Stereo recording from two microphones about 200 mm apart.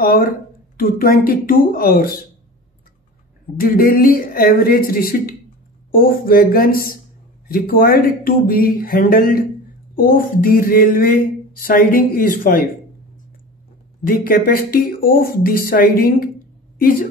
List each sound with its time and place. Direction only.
0.0 s speech: 45° left (ahead or behind)
3.5 s speech: 45° left (ahead or behind)
14.0 s speech: 45° left (ahead or behind)